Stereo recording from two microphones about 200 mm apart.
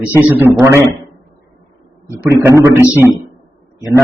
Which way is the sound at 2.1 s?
15° right (ahead or behind).